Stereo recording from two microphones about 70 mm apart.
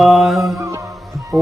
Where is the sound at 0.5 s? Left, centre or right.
Right.